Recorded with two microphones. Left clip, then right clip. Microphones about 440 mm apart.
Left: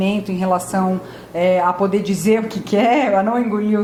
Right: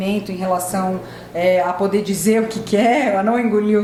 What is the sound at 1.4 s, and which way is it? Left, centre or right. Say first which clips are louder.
A woman's voice: left 1 dB; left.